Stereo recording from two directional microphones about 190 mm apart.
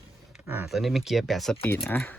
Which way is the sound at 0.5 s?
Centre (ahead or behind).